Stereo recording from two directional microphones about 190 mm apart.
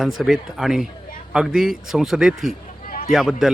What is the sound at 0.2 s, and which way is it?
Speech, centre (ahead or behind).